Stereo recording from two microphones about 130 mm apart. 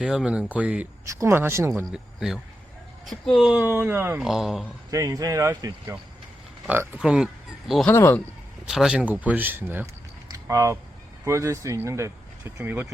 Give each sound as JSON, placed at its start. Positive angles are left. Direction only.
{"t": 0.0, "sound": "speech", "side_deg": -5}
{"t": 1.0, "sound": "speech", "side_deg": -20}
{"t": 1.9, "sound": "speech", "side_deg": -5}
{"t": 3.6, "sound": "speech", "side_deg": -15}
{"t": 4.2, "sound": "speech", "side_deg": -5}
{"t": 4.9, "sound": "speech", "side_deg": -25}
{"t": 7.9, "sound": "speech", "side_deg": 15}
{"t": 8.6, "sound": "speech", "side_deg": -5}
{"t": 10.2, "sound": "a sound", "side_deg": -25}
{"t": 11.3, "sound": "speech", "side_deg": -20}